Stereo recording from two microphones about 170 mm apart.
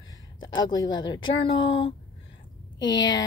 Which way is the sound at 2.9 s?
90° left.